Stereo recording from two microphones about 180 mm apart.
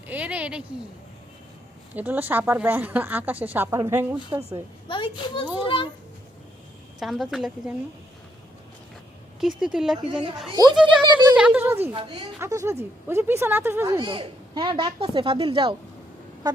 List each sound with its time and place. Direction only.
0.1 s speech: 10° right (ahead or behind)
2.0 s speech: 10° right (ahead or behind)
4.9 s a child's voice: 30° left (ahead or behind)
7.0 s speech: centre (ahead or behind)
9.6 s speech: 5° right (ahead or behind)
10.5 s speech: 20° right (ahead or behind)
11.3 s speech: 5° right (ahead or behind)
11.9 s speech: 30° right (ahead or behind)
12.4 s speech: 15° right (ahead or behind)
14.0 s speech: 25° right (ahead or behind)